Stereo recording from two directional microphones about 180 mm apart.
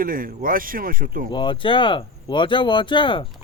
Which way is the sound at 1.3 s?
25° left (ahead or behind).